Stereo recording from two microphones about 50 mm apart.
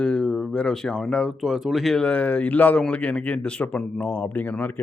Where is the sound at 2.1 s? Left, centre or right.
Left.